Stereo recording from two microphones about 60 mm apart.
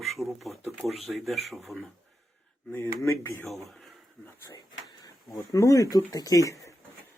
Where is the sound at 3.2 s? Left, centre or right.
Left.